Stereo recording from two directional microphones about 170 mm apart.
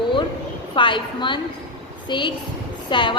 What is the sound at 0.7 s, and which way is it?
A woman's voice, 30° left (ahead or behind).